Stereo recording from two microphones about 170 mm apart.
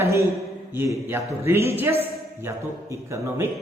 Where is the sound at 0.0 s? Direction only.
15° right (ahead or behind).